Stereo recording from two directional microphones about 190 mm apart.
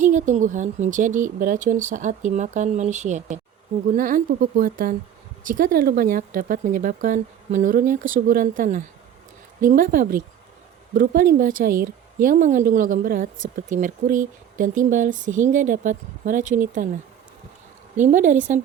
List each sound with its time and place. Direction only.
0.0 s a woman's voice: 40° right (ahead or behind)